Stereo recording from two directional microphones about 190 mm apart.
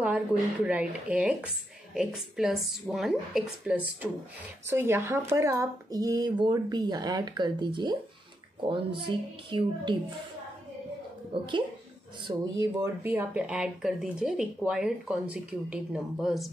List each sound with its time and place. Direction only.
0.7 s speech: 5° right (ahead or behind); by 9.9 s 25° right (ahead or behind)
11.3 s speech: 25° right (ahead or behind); by 16.4 s centre (ahead or behind)